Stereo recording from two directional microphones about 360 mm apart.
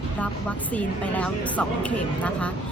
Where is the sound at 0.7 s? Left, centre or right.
Centre.